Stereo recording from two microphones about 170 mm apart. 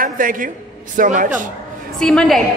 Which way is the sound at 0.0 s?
55° right (ahead or behind).